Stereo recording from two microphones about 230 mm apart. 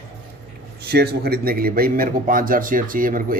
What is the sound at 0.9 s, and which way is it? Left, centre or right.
A man's voice, right.